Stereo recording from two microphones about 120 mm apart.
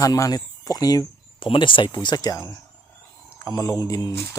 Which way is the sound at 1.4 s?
45° left (ahead or behind).